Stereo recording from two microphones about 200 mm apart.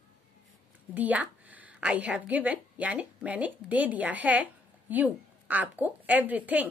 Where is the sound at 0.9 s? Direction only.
5° right (ahead or behind).